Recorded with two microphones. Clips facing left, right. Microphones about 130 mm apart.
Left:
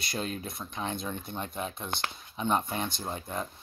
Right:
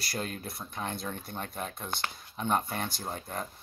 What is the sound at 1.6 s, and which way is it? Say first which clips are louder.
Speech: left 1 dB; 5° left (ahead or behind).